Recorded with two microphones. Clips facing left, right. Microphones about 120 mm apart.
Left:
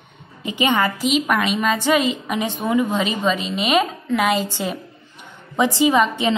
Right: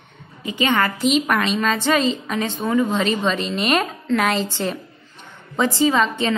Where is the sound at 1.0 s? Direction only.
5° left (ahead or behind).